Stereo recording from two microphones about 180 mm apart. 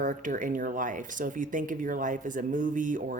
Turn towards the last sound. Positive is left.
turn(degrees=-45)  # may be behind; listen again after turning